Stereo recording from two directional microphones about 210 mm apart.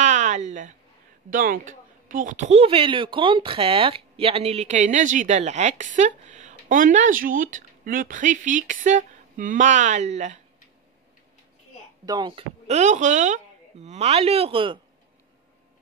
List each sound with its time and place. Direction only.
0.0 s a sound: 35° right (ahead or behind)
1.3 s speech: 40° right (ahead or behind)
12.1 s speech: 20° right (ahead or behind)